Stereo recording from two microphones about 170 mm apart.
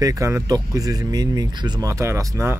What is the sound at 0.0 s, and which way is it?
Speech, 20° right (ahead or behind).